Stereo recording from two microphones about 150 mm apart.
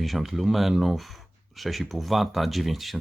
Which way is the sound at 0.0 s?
Centre (ahead or behind).